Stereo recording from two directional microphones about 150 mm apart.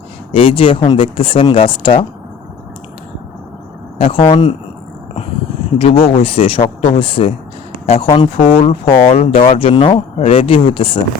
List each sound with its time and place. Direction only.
0.3 s speech: 35° left (ahead or behind)
3.9 s speech: 40° left (ahead or behind)
5.7 s speech: 40° left (ahead or behind)